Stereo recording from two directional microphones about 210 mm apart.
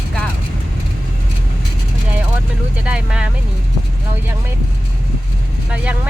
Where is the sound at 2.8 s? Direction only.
5° right (ahead or behind).